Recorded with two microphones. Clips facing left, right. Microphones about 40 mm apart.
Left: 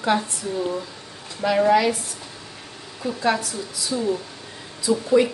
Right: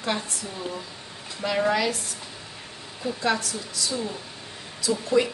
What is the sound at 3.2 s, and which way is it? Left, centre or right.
Speech, centre.